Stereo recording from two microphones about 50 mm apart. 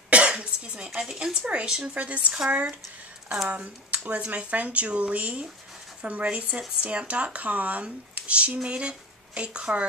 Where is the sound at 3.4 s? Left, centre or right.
Right.